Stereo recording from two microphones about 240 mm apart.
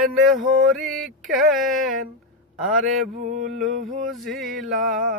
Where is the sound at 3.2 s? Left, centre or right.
Right.